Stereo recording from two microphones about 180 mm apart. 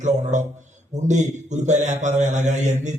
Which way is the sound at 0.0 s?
40° right (ahead or behind).